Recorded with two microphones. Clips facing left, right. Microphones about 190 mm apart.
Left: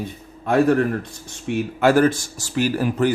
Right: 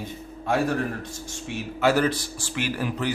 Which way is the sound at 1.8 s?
50° left (ahead or behind).